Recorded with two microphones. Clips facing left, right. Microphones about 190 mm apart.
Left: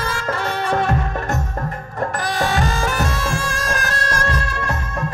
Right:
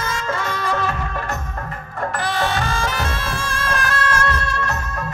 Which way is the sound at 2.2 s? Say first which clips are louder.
Left 1 dB; 40° left (ahead or behind).